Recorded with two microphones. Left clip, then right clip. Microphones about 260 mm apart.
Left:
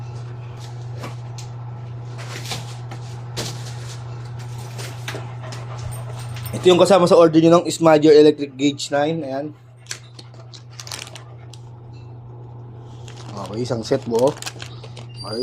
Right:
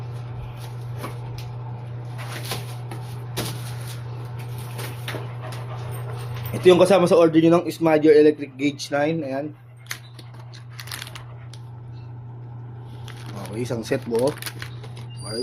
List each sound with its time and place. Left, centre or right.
6.5 s speech: centre
13.6 s speech: centre
14.2 s shuffling cards: centre